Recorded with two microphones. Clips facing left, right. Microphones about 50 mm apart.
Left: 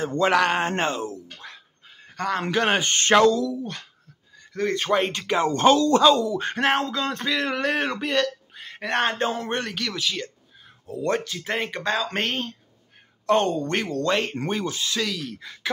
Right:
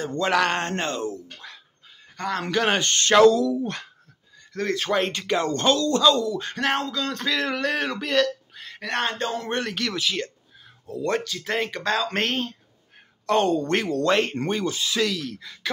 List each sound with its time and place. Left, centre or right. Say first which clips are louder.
0.0 s speech: left 2 dB; centre
1.0 s a sound: right 2 dB; centre
2.1 s speech: left 1 dB; centre
2.9 s speech: left 1 dB; left
4.6 s speech: left 1 dB; centre
8.7 s speech: left 3 dB; left
9.4 s speech: right 1 dB; centre
10.9 s speech: even; centre
15.1 s speech: right 1 dB; centre